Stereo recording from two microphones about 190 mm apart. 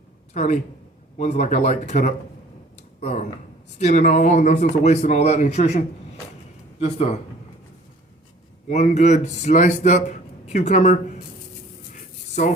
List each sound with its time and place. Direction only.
1.2 s a man's voice: 40° left (ahead or behind)
8.7 s a man's voice: 35° left (ahead or behind)